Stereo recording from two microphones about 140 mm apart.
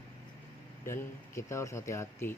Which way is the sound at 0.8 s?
20° left (ahead or behind).